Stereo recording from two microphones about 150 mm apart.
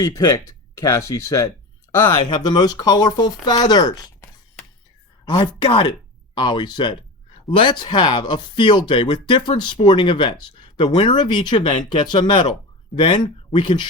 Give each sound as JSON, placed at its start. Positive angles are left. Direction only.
{"t": 0.0, "sound": "speech", "side_deg": 25}
{"t": 1.9, "sound": "a sound", "side_deg": 25}
{"t": 2.3, "sound": "speech", "side_deg": 30}